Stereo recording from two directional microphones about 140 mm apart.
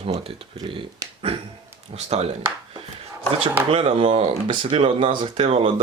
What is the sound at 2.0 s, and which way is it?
Speech, 50° right (ahead or behind).